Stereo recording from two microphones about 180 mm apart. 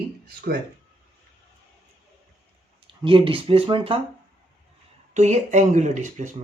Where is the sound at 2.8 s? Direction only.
30° right (ahead or behind).